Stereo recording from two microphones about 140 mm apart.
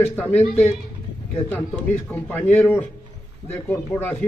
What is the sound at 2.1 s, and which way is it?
Speech, 15° left (ahead or behind).